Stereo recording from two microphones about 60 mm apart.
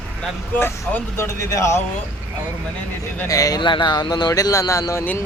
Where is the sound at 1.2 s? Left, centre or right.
Left.